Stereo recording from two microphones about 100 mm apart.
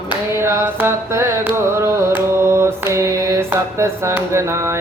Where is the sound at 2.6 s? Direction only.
30° right (ahead or behind).